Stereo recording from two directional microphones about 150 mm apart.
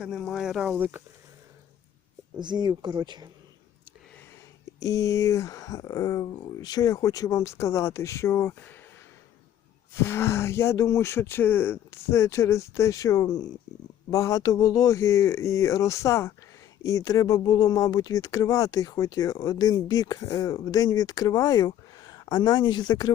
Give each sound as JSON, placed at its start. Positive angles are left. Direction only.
{"t": 0.0, "sound": "speech", "side_deg": 0}
{"t": 2.4, "sound": "speech", "side_deg": -30}
{"t": 4.8, "sound": "speech", "side_deg": 20}
{"t": 9.9, "sound": "speech", "side_deg": 15}